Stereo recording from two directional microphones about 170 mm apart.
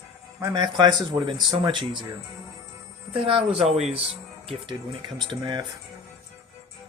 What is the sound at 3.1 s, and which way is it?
Speech, 35° right (ahead or behind).